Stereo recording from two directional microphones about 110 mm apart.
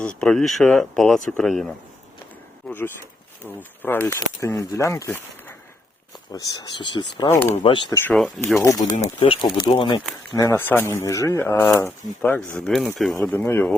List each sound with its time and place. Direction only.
0.0 s speech: 5° left (ahead or behind)
2.6 s a sound: 20° left (ahead or behind)
3.4 s speech: 20° left (ahead or behind)
6.3 s speech: 40° left (ahead or behind)
7.3 s speech: 20° left (ahead or behind)
7.7 s speech: 50° left (ahead or behind)
8.6 s speech: 30° left (ahead or behind)
9.2 s speech: 50° left (ahead or behind)
10.3 s speech: 30° left (ahead or behind)
12.7 s speech: centre (ahead or behind)
13.2 s speech: 20° left (ahead or behind)